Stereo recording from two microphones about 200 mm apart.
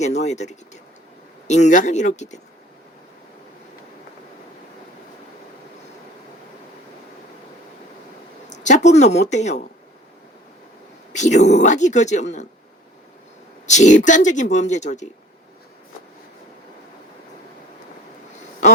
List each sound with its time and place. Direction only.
0.0 s speech: 35° left (ahead or behind)
8.4 s speech: 35° left (ahead or behind)
11.1 s speech: 35° left (ahead or behind)
13.7 s speech: 35° left (ahead or behind)